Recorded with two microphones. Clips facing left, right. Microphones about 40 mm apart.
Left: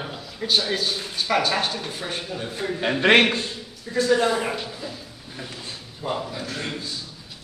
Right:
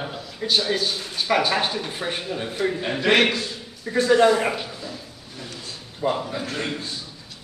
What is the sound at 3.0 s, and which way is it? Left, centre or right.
Speech, left.